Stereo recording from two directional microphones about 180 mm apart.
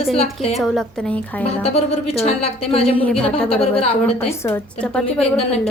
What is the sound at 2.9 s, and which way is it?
Speech, 10° left (ahead or behind).